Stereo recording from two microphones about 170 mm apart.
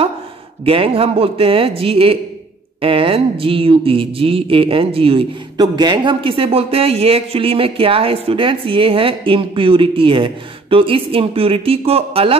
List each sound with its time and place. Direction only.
0.7 s speech: 30° right (ahead or behind)